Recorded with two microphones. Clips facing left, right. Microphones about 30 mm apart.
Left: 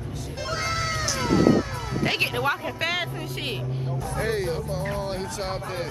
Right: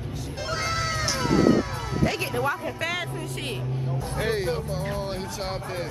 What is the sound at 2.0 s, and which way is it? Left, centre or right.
Speech, left.